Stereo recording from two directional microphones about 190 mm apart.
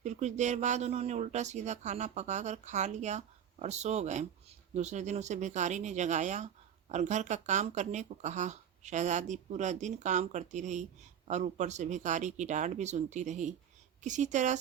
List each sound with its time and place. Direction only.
0.0 s speech: 40° right (ahead or behind)